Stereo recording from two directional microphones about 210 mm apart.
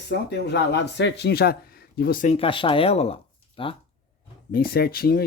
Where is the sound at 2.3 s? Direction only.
25° left (ahead or behind).